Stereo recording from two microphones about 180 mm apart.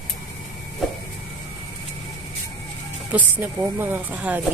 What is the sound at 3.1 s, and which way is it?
A woman's voice, 10° right (ahead or behind).